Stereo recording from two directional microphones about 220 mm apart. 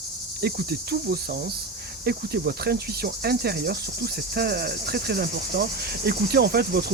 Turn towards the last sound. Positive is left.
turn(degrees=-45)  # may be behind; listen again after turning